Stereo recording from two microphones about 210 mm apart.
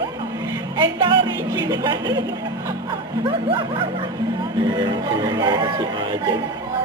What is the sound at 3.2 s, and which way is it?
Speech, 25° right (ahead or behind).